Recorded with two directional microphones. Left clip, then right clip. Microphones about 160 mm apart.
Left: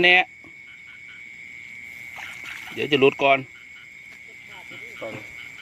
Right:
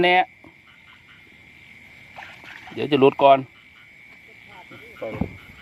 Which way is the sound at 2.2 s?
5° right (ahead or behind).